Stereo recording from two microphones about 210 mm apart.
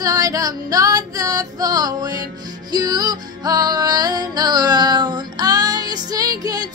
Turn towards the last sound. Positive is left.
turn(degrees=-20)  # may be behind; listen again after turning